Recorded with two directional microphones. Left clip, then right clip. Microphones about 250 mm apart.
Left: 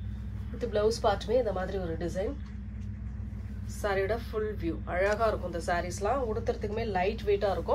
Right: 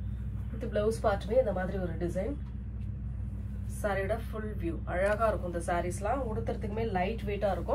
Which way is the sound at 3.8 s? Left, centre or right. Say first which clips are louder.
Left 2 dB; left.